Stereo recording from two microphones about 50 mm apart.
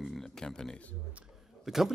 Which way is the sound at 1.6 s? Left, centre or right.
Centre.